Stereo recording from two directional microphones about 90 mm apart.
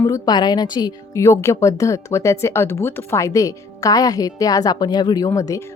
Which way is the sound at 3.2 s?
40° left (ahead or behind).